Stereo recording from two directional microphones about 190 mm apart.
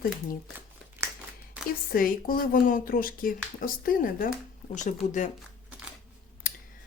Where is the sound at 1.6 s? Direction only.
5° right (ahead or behind).